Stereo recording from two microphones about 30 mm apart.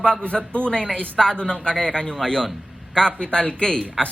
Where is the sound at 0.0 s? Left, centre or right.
Left.